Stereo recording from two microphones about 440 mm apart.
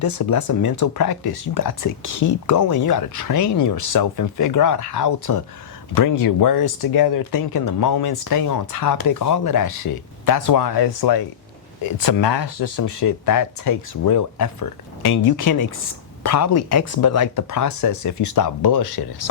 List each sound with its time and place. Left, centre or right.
0.0 s speech: left